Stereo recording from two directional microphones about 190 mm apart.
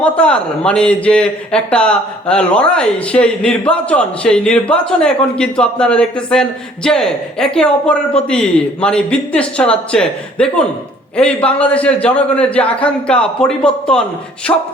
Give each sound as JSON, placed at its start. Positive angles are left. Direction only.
{"t": 0.0, "sound": "a man's voice", "side_deg": 5}
{"t": 14.5, "sound": "speech", "side_deg": 15}